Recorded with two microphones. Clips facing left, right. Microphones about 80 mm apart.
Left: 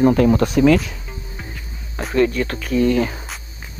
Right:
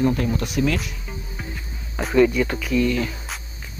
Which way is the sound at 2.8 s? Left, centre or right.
Left.